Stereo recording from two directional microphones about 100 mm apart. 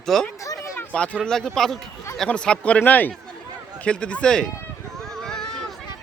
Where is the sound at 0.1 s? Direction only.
Centre (ahead or behind).